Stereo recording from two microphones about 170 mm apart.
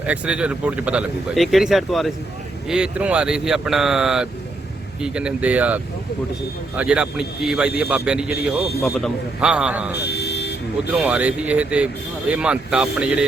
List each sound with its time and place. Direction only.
0.0 s speech: 5° right (ahead or behind)
9.9 s a sound: 75° left (ahead or behind)
11.0 s speech: 5° right (ahead or behind)